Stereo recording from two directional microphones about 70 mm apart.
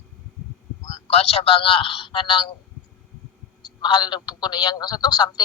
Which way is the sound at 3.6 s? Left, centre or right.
Left.